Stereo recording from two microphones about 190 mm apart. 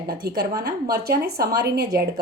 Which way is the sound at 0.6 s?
55° right (ahead or behind).